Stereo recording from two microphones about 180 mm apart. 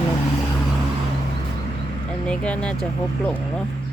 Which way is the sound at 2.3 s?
5° left (ahead or behind).